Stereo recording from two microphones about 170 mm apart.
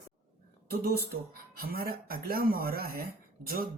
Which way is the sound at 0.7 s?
65° right (ahead or behind).